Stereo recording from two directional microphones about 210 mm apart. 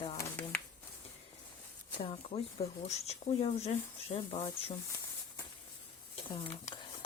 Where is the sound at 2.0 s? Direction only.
30° left (ahead or behind).